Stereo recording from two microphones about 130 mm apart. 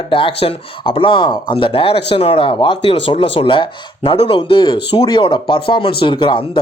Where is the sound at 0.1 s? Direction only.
45° left (ahead or behind).